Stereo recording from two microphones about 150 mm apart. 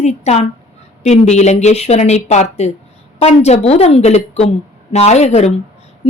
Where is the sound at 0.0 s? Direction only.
45° left (ahead or behind).